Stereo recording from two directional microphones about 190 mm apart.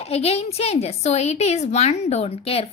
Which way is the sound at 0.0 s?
30° left (ahead or behind).